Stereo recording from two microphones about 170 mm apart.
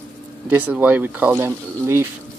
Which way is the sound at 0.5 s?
10° right (ahead or behind).